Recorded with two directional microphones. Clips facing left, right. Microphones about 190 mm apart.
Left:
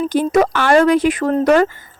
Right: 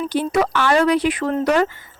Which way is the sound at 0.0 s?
45° left (ahead or behind).